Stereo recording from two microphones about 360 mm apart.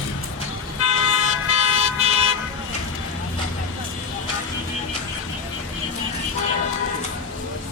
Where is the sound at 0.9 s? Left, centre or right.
Centre.